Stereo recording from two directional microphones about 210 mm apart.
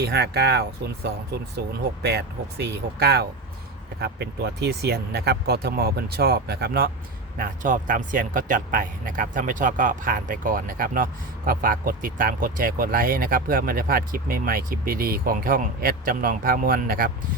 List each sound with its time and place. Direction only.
0.0 s speech: 50° right (ahead or behind)